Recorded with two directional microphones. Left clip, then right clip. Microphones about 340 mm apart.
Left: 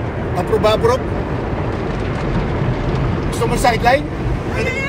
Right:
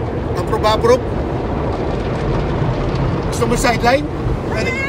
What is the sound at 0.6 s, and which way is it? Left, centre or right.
Speech, centre.